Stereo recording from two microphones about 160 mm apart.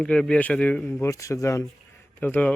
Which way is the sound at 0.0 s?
5° left (ahead or behind).